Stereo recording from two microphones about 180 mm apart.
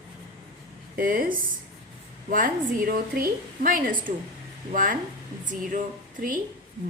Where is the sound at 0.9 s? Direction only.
50° right (ahead or behind).